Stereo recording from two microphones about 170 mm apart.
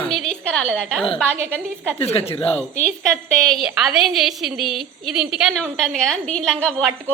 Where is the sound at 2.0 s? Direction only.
35° left (ahead or behind).